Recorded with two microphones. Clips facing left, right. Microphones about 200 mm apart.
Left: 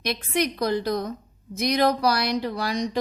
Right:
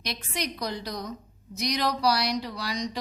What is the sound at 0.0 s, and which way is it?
A woman's voice, 55° left (ahead or behind).